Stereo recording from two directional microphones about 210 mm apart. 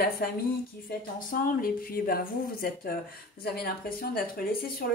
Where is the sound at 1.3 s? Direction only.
45° left (ahead or behind).